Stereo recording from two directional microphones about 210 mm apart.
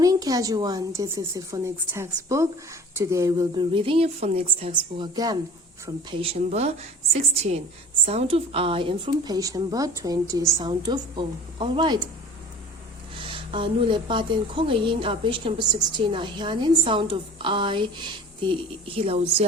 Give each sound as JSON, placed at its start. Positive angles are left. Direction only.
{"t": 0.0, "sound": "a woman's voice", "side_deg": -15}
{"t": 13.1, "sound": "speech", "side_deg": -25}